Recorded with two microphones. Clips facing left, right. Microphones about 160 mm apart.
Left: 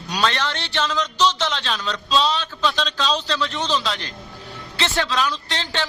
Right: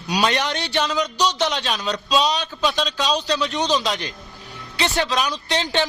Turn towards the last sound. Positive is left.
turn(degrees=-15)  # may be behind; listen again after turning